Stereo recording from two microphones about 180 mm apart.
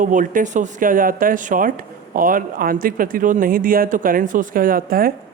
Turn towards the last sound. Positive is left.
turn(degrees=-55)  # may be behind; listen again after turning